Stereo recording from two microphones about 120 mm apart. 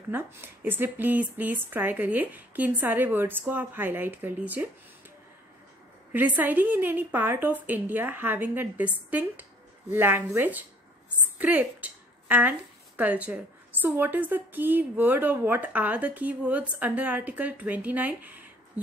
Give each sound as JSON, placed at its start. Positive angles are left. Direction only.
{"t": 0.1, "sound": "a woman's voice", "side_deg": -15}
{"t": 6.1, "sound": "a woman's voice", "side_deg": -15}